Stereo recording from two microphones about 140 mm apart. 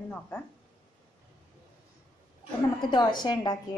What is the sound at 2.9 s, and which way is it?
Speech, 30° left (ahead or behind).